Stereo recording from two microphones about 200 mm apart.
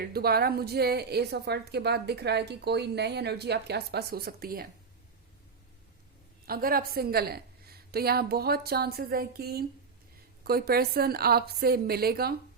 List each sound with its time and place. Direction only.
0.0 s a woman's voice: 50° right (ahead or behind)
6.5 s a woman's voice: 45° right (ahead or behind)